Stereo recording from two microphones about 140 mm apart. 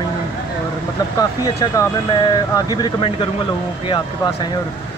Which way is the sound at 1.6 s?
30° left (ahead or behind).